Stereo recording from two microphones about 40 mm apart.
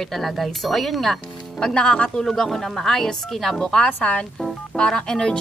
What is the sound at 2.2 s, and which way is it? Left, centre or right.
Music, centre.